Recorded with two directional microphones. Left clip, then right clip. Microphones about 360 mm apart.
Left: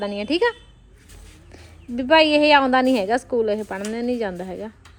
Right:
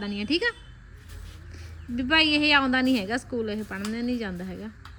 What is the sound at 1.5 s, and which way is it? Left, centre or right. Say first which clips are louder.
A woman's voice: left 4 dB; centre.